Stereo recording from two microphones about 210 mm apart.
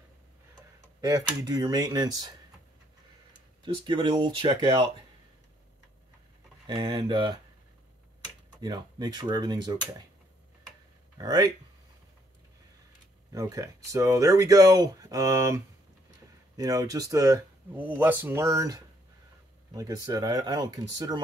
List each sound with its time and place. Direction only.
1.0 s speech: 20° right (ahead or behind)
3.6 s speech: 20° right (ahead or behind)
6.7 s speech: 20° right (ahead or behind)
8.5 s speech: 20° right (ahead or behind)
11.1 s speech: 15° right (ahead or behind)
13.3 s speech: 15° right (ahead or behind)